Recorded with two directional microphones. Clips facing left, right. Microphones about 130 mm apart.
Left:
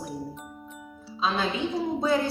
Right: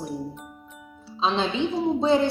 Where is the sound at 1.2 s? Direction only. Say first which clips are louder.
Right 3 dB; 25° right (ahead or behind).